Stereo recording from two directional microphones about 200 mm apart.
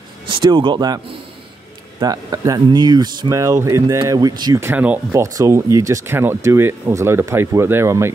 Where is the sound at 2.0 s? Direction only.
20° right (ahead or behind).